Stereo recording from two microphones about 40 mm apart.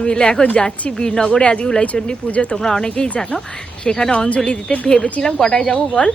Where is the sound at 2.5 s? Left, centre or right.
Centre.